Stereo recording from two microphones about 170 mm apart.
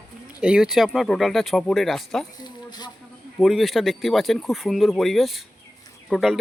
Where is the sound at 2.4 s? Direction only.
25° left (ahead or behind).